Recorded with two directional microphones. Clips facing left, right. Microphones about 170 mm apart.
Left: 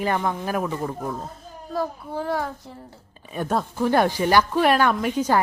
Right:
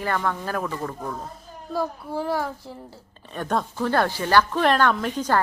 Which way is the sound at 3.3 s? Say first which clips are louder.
Left 1 dB; 5° left (ahead or behind).